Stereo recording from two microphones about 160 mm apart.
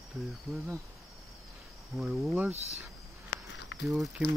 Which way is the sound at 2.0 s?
Centre (ahead or behind).